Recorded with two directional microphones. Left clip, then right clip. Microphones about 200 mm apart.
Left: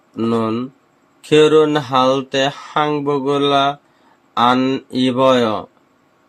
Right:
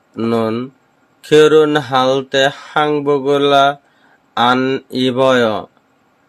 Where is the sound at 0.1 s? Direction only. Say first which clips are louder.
Right 2 dB; 20° right (ahead or behind).